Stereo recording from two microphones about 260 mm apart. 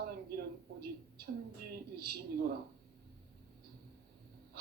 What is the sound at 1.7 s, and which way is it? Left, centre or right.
Speech, right.